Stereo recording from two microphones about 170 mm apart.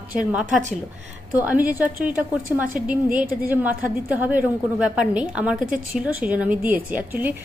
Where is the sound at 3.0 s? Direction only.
55° right (ahead or behind).